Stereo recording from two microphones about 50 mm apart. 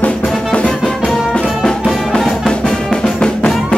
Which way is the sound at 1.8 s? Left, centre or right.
Centre.